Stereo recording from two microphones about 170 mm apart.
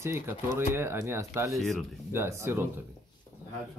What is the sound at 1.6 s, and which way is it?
Speech, centre (ahead or behind).